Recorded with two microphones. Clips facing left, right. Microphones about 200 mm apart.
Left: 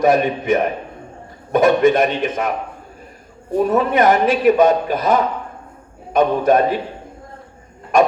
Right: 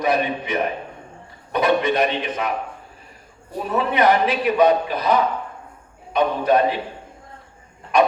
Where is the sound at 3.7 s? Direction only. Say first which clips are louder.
Left 2 dB; 45° left (ahead or behind).